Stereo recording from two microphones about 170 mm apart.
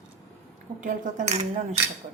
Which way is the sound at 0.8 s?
45° right (ahead or behind).